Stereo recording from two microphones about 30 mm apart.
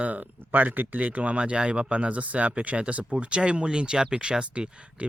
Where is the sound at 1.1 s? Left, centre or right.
Right.